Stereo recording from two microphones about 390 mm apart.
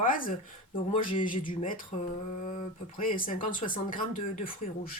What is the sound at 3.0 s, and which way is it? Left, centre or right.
Speech, left.